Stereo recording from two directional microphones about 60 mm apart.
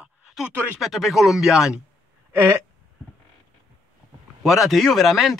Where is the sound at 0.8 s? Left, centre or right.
Centre.